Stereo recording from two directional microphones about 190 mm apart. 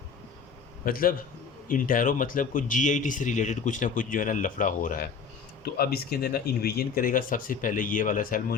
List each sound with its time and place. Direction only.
0.9 s speech: 50° left (ahead or behind)